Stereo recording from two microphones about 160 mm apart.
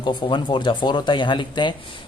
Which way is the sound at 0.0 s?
30° left (ahead or behind).